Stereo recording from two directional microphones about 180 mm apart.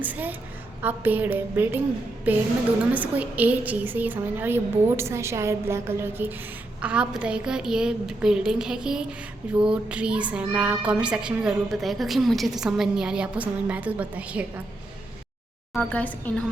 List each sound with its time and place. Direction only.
0.0 s a woman's voice: 10° right (ahead or behind)
15.7 s a woman's voice: 5° left (ahead or behind)